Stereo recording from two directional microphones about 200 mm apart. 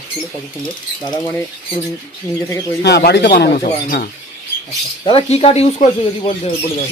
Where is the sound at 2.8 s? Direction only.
55° left (ahead or behind).